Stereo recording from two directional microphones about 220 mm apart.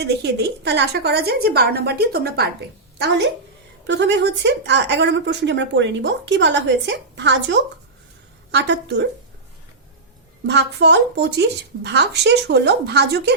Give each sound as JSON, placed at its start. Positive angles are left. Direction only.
{"t": 0.0, "sound": "a woman's voice", "side_deg": -50}
{"t": 3.8, "sound": "a woman's voice", "side_deg": -55}
{"t": 10.4, "sound": "a woman's voice", "side_deg": -50}